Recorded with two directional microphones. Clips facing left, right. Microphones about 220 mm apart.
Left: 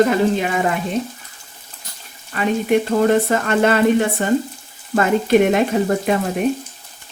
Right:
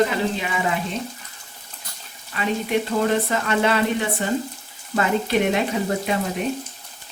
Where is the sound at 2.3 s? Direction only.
50° left (ahead or behind).